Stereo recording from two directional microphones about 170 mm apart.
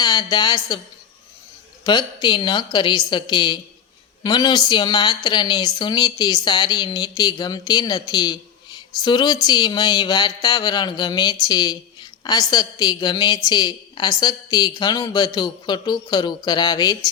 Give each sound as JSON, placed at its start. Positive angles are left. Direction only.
{"t": 0.0, "sound": "speech", "side_deg": 25}
{"t": 1.8, "sound": "a woman's voice", "side_deg": 25}